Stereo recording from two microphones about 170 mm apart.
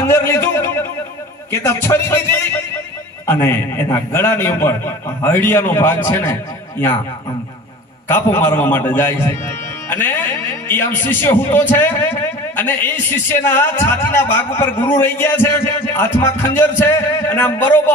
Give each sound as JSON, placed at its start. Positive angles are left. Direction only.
{"t": 0.0, "sound": "a man's voice", "side_deg": 15}
{"t": 8.1, "sound": "a man's voice", "side_deg": 15}